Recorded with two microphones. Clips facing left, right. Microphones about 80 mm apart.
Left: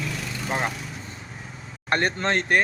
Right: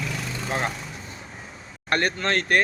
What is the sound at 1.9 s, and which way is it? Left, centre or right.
Speech, left.